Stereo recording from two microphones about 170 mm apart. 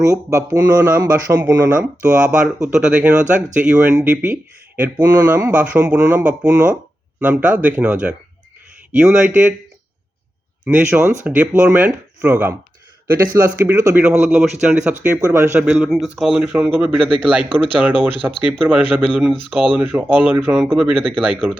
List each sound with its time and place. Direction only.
0.0 s speech: 20° right (ahead or behind)
2.2 s speech: 5° right (ahead or behind)
4.9 s speech: 20° right (ahead or behind)
9.0 s speech: 10° right (ahead or behind)
10.7 s speech: 10° right (ahead or behind)
13.1 s a man's voice: 20° right (ahead or behind)